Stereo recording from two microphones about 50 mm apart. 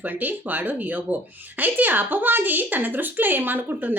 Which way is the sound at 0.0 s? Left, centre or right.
Right.